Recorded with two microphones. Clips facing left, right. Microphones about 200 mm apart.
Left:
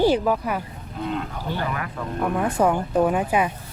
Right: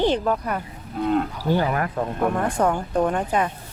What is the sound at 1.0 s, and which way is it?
Speech, 45° right (ahead or behind).